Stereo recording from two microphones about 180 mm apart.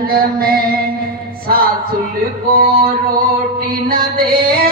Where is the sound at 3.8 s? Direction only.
55° right (ahead or behind).